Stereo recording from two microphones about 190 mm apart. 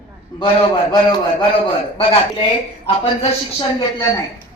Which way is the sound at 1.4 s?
25° left (ahead or behind).